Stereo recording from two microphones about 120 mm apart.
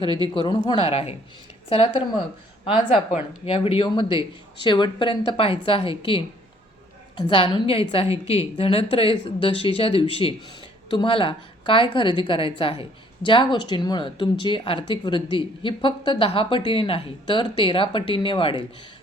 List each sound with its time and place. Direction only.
0.3 s speech: 40° left (ahead or behind)
0.8 s a woman's voice: 55° left (ahead or behind)